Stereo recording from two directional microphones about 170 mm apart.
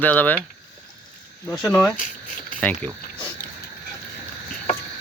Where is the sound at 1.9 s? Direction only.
50° left (ahead or behind).